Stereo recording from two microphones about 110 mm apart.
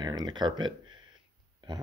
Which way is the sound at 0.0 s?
40° right (ahead or behind).